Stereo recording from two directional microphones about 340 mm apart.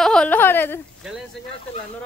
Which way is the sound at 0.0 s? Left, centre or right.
Centre.